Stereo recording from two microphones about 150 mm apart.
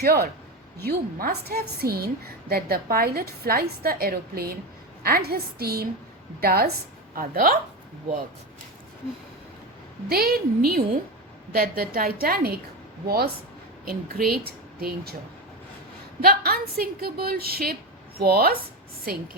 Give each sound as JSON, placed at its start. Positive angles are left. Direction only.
{"t": 0.0, "sound": "a woman's voice", "side_deg": -90}
{"t": 7.2, "sound": "speech", "side_deg": -75}
{"t": 10.1, "sound": "a woman's voice", "side_deg": -85}
{"t": 16.2, "sound": "a woman's voice", "side_deg": -75}